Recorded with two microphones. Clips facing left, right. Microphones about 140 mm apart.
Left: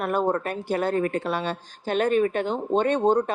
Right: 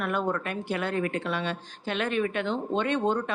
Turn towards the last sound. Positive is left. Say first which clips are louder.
# left 5 dB
turn(degrees=40)  # may be behind; listen again after turning